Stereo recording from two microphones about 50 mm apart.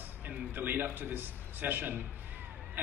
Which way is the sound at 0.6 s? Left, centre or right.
Right.